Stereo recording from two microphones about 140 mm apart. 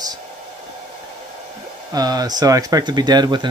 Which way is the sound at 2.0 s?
30° right (ahead or behind).